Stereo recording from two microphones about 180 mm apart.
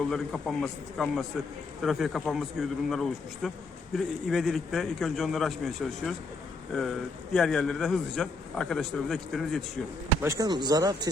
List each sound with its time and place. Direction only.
0.1 s a man's voice: 5° left (ahead or behind)
7.3 s a man's voice: 5° left (ahead or behind)
10.2 s speech: 15° right (ahead or behind)